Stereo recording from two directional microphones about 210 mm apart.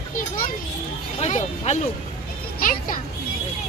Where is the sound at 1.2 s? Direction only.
35° left (ahead or behind).